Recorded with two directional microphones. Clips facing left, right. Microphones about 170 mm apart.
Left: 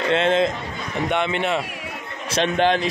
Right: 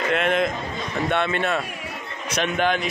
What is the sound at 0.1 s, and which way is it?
Speech, 25° left (ahead or behind).